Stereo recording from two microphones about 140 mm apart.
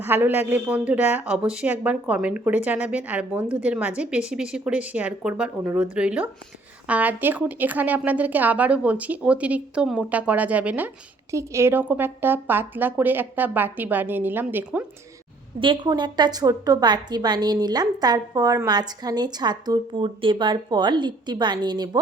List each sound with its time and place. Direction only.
0.0 s a woman's voice: 15° right (ahead or behind)
15.6 s a woman's voice: 35° right (ahead or behind)